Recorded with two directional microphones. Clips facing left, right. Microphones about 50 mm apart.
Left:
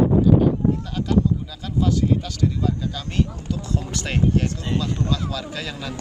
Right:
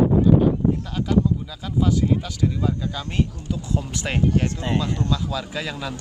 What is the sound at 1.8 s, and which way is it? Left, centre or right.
Speech, centre.